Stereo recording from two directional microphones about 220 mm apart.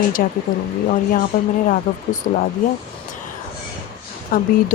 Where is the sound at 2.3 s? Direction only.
45° left (ahead or behind).